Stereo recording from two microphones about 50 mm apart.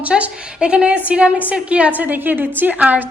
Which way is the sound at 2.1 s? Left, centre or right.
Right.